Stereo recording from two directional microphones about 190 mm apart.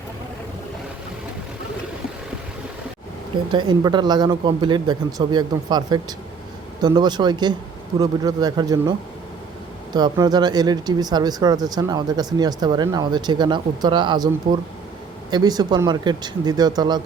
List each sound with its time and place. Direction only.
3.5 s speech: 25° right (ahead or behind)